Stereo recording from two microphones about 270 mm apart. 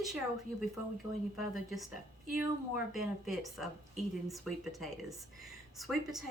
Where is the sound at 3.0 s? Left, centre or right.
Centre.